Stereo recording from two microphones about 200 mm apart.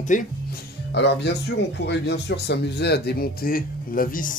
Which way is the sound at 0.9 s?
60° left (ahead or behind).